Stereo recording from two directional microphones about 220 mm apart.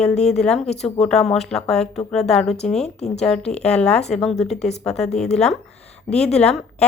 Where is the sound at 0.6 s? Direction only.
30° left (ahead or behind).